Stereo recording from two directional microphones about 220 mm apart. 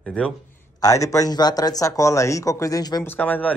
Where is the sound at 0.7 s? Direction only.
15° left (ahead or behind).